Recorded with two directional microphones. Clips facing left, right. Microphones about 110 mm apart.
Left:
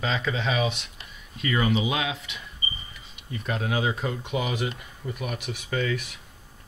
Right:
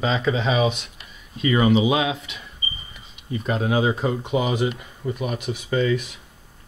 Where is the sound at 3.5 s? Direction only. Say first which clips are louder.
Right 6 dB; 10° right (ahead or behind).